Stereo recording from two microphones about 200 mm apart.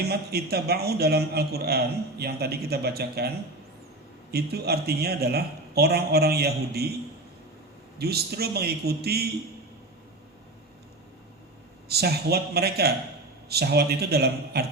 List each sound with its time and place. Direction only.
0.0 s a man's voice: 50° right (ahead or behind)
7.9 s a man's voice: 50° right (ahead or behind)
11.9 s a man's voice: 50° right (ahead or behind)